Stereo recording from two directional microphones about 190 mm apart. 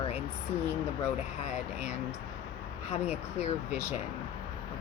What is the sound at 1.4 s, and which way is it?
Speech, 40° left (ahead or behind).